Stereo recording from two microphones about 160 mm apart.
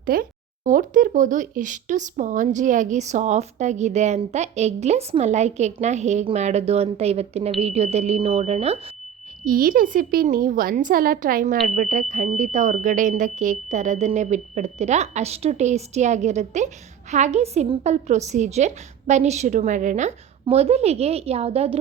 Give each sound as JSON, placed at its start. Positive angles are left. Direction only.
{"t": 0.0, "sound": "speech", "side_deg": -60}
{"t": 9.4, "sound": "a woman's voice", "side_deg": -65}